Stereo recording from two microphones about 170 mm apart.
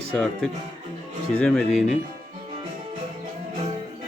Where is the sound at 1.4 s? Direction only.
5° left (ahead or behind).